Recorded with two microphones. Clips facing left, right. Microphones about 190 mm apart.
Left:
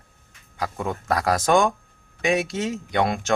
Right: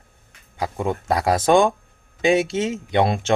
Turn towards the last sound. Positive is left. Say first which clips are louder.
# right 3 dB
turn(degrees=-25)  # may be behind; listen again after turning